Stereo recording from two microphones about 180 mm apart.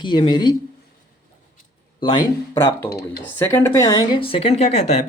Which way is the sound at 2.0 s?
25° left (ahead or behind).